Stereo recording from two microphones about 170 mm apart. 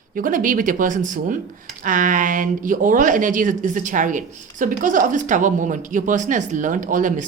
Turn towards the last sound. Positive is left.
turn(degrees=-50)  # may be behind; listen again after turning